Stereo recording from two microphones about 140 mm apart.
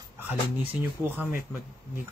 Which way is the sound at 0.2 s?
15° right (ahead or behind).